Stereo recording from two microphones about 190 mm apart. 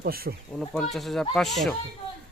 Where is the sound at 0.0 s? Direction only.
55° right (ahead or behind).